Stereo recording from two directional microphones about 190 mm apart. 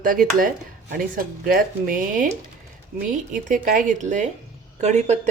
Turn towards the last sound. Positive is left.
turn(degrees=-35)  # may be behind; listen again after turning